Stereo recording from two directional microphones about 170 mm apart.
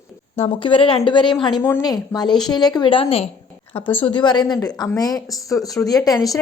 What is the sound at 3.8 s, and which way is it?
Speech, 10° left (ahead or behind).